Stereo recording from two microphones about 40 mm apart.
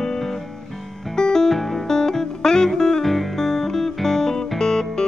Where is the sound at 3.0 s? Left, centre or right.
Centre.